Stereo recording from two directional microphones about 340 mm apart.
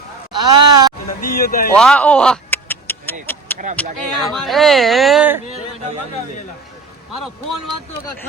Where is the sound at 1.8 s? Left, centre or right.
Centre.